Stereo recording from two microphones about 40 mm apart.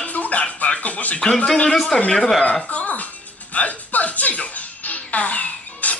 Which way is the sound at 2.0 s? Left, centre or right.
Left.